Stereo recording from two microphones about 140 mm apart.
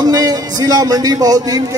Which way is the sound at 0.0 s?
30° right (ahead or behind).